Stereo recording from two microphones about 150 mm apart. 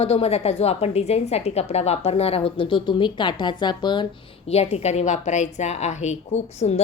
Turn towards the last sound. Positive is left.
turn(degrees=45)  # may be behind; listen again after turning